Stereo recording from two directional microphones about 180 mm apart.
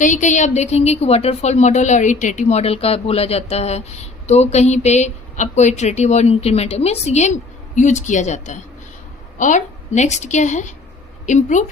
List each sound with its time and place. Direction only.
0.0 s a woman's voice: 45° left (ahead or behind)